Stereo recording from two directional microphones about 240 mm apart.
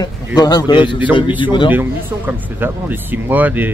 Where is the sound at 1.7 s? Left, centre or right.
Centre.